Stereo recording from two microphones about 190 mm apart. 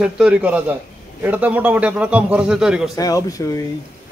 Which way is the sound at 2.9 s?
20° left (ahead or behind).